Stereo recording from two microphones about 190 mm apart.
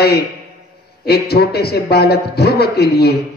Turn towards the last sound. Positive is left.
turn(degrees=55)  # may be behind; listen again after turning